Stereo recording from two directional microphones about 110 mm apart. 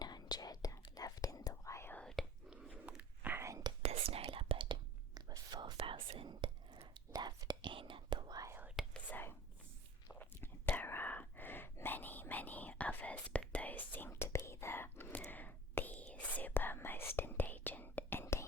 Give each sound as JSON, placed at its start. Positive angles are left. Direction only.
{"t": 0.0, "sound": "whispering", "side_deg": 35}
{"t": 1.9, "sound": "whispering", "side_deg": 10}
{"t": 2.8, "sound": "whispering", "side_deg": -15}
{"t": 3.8, "sound": "whispering", "side_deg": -60}
{"t": 5.1, "sound": "whispering", "side_deg": -40}
{"t": 5.7, "sound": "whispering", "side_deg": -55}
{"t": 6.9, "sound": "whispering", "side_deg": -40}
{"t": 8.3, "sound": "whispering", "side_deg": -35}
{"t": 8.8, "sound": "whispering", "side_deg": -5}
{"t": 10.1, "sound": "whispering", "side_deg": 15}